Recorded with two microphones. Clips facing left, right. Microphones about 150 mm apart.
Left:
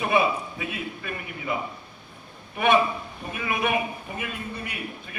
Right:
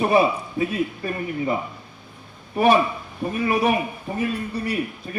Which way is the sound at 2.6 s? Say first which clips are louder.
Right 4 dB; 35° right (ahead or behind).